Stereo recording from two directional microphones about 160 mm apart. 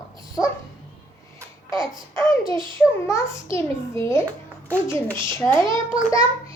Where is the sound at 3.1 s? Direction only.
15° left (ahead or behind).